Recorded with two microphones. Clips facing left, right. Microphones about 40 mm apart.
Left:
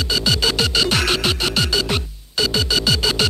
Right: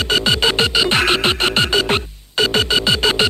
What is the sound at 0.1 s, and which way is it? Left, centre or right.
Music, right.